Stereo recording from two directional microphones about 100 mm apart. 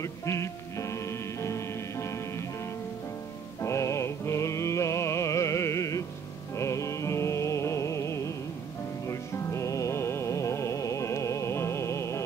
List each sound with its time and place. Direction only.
0.0 s music: 30° left (ahead or behind)
3.6 s music: 30° left (ahead or behind)